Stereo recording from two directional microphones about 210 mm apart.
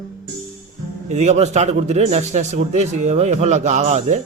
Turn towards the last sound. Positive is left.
turn(degrees=-30)  # may be behind; listen again after turning